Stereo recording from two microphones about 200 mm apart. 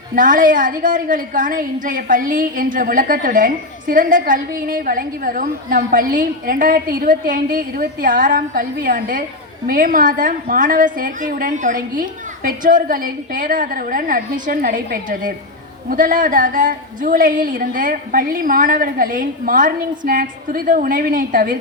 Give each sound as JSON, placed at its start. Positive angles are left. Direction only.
{"t": 0.2, "sound": "a woman's voice", "side_deg": -40}